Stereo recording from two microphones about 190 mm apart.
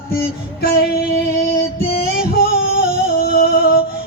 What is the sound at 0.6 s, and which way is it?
Female singing, 55° left (ahead or behind).